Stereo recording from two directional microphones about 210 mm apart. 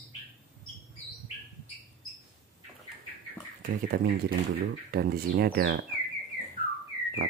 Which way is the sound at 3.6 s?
45° right (ahead or behind).